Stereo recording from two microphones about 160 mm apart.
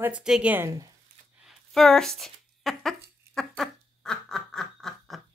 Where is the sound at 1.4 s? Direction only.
Centre (ahead or behind).